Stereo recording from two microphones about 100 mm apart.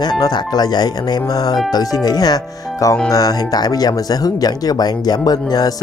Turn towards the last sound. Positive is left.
turn(degrees=40)  # may be behind; listen again after turning